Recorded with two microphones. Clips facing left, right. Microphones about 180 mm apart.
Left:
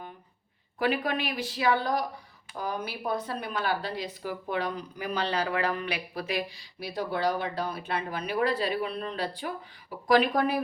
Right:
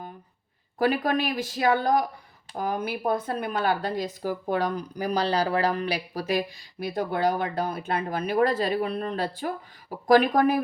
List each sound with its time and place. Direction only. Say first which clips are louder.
0.8 s speech: right 4 dB; 45° right (ahead or behind)